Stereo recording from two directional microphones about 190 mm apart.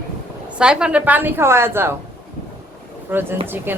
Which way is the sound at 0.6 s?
5° right (ahead or behind).